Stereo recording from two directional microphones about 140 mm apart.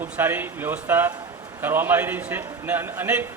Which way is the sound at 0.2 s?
15° right (ahead or behind).